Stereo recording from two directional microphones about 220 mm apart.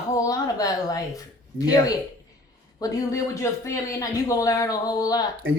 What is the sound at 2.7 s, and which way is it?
Speech, 15° left (ahead or behind).